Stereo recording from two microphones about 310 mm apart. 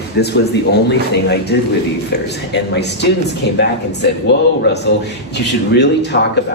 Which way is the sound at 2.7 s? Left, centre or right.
Left.